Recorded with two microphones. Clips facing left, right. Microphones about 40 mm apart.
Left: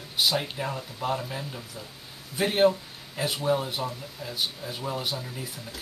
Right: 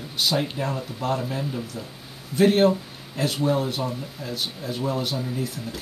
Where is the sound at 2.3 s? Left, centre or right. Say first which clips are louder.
Right 4 dB; centre.